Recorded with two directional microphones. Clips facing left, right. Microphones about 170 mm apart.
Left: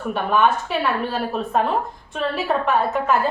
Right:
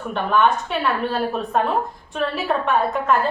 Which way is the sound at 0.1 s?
5° left (ahead or behind).